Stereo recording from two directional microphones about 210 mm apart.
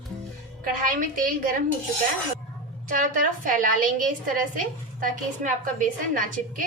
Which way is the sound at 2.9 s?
40° right (ahead or behind).